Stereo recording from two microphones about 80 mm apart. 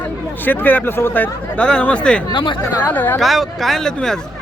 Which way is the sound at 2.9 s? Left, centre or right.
Left.